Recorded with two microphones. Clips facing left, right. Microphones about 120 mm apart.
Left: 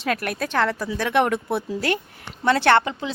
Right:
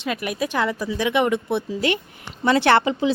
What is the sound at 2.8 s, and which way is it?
Speech, 15° right (ahead or behind).